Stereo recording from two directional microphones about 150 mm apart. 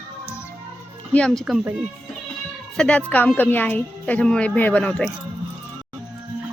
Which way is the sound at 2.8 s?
5° left (ahead or behind).